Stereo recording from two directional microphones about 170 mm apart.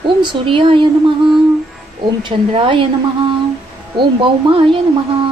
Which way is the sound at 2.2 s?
30° right (ahead or behind).